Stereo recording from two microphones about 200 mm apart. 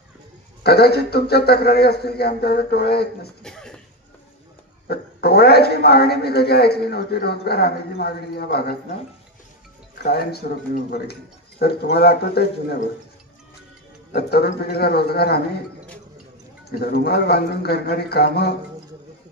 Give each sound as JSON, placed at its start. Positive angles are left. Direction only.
{"t": 0.7, "sound": "speech", "side_deg": 55}
{"t": 3.4, "sound": "a sound", "side_deg": 5}
{"t": 4.8, "sound": "speech", "side_deg": 50}
{"t": 10.0, "sound": "speech", "side_deg": 50}
{"t": 14.1, "sound": "speech", "side_deg": 50}
{"t": 16.7, "sound": "speech", "side_deg": 50}